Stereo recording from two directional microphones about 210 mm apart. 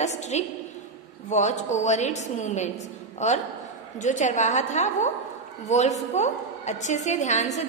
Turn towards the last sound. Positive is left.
turn(degrees=35)  # may be behind; listen again after turning